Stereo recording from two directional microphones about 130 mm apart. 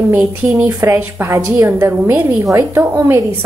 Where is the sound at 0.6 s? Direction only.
20° right (ahead or behind).